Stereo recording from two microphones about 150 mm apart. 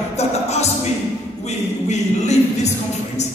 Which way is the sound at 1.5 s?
50° left (ahead or behind).